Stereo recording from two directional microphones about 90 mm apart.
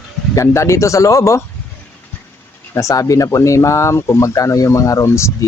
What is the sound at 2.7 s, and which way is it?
Speech, 35° left (ahead or behind).